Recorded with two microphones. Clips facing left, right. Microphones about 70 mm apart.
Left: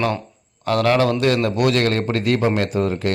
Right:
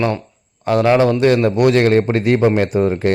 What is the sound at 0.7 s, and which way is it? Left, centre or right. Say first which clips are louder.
A man's voice: right 4 dB; right.